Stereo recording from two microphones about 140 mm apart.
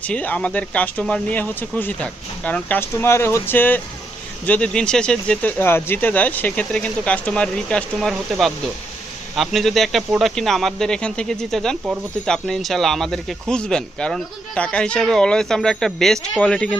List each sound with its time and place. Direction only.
0.1 s speech: 10° left (ahead or behind)